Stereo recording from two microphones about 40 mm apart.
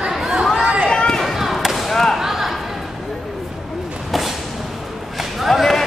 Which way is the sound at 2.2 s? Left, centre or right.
Centre.